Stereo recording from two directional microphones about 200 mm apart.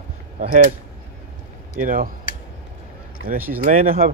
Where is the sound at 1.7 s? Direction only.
45° right (ahead or behind).